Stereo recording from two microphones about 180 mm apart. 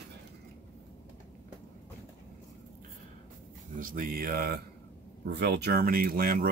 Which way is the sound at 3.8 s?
50° right (ahead or behind).